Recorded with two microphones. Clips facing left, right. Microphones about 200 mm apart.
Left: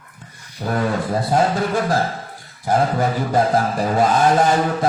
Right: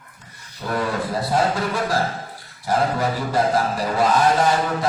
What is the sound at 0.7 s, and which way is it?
Speech, 50° left (ahead or behind).